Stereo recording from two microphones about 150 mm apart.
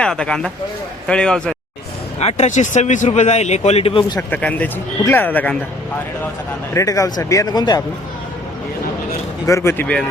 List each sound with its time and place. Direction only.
0.0 s speech: 5° left (ahead or behind)
2.1 s a man's voice: 45° left (ahead or behind)
4.2 s speech: 10° left (ahead or behind)
6.7 s speech: 20° left (ahead or behind)
9.5 s speech: 20° left (ahead or behind)